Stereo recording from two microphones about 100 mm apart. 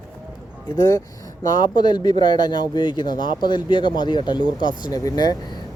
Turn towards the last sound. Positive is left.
turn(degrees=40)  # may be behind; listen again after turning